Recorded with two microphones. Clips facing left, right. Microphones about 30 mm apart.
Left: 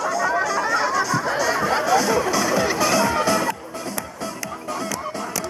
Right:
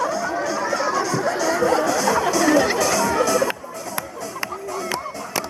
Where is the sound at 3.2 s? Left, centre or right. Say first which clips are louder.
Right 1 dB; left.